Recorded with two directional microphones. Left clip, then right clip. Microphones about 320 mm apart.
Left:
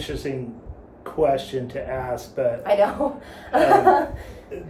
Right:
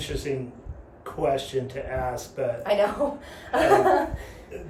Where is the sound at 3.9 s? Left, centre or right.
Centre.